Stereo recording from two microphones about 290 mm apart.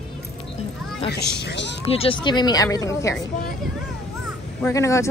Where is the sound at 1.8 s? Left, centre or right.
Centre.